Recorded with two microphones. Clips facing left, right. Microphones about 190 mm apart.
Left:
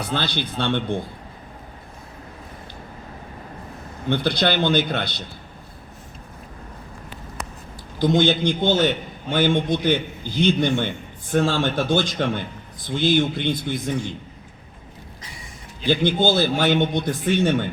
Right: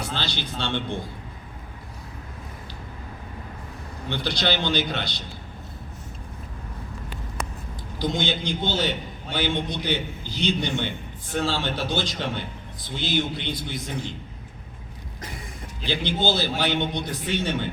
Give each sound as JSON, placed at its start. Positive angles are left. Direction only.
{"t": 0.1, "sound": "a man's voice", "side_deg": 55}
{"t": 4.1, "sound": "a man's voice", "side_deg": 55}
{"t": 7.9, "sound": "a man's voice", "side_deg": 55}
{"t": 15.9, "sound": "a man's voice", "side_deg": 50}